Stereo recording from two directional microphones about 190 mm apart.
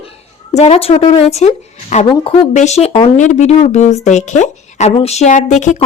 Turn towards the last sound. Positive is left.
turn(degrees=40)  # may be behind; listen again after turning